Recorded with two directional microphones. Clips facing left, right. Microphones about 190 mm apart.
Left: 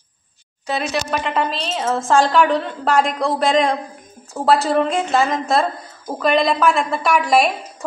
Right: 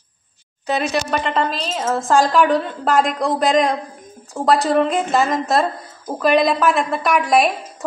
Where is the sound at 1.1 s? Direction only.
5° left (ahead or behind).